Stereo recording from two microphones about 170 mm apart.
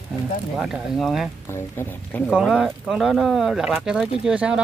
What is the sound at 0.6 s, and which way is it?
Speech, 5° right (ahead or behind).